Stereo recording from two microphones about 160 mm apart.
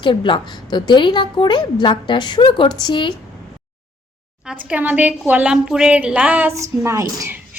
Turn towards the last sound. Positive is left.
turn(degrees=-20)  # may be behind; listen again after turning